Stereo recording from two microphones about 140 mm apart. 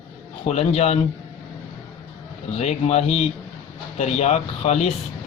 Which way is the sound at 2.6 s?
50° left (ahead or behind).